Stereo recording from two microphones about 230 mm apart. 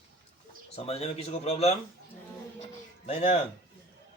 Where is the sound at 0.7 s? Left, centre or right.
Left.